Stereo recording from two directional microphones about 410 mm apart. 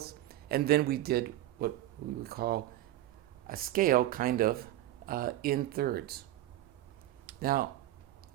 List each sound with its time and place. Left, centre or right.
0.0 s a sound: right
2.2 s speech: right
7.3 s speech: right